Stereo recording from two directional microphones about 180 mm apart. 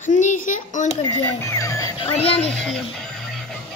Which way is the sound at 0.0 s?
45° left (ahead or behind).